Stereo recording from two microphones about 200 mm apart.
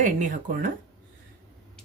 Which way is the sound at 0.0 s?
40° right (ahead or behind).